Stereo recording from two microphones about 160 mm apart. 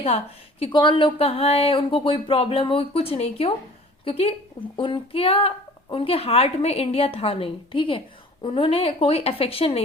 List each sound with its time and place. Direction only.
0.6 s a woman's voice: 30° left (ahead or behind)